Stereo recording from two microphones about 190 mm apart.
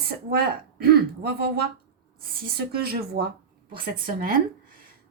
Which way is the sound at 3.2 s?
60° right (ahead or behind).